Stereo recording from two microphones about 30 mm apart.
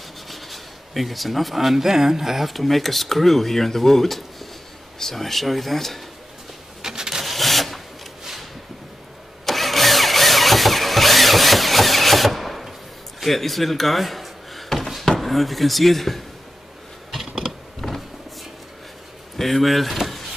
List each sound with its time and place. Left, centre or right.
0.3 s speech: centre
6.8 s a sound: centre
7.2 s a sound: centre
9.5 s engine starting: centre
13.2 s door: centre
15.1 s speech: centre
17.2 s mechanisms: centre
17.7 s power windows: centre
19.3 s speech: centre